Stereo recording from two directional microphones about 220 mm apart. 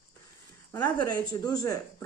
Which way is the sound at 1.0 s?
20° left (ahead or behind).